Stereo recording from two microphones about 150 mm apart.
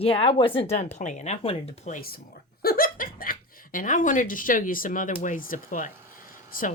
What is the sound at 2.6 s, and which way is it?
Speech, 80° left.